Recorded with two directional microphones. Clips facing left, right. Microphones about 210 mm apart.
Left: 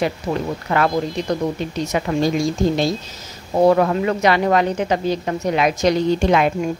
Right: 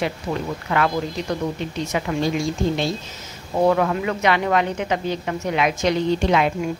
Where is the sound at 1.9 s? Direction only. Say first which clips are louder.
Left 3 dB; 40° left (ahead or behind).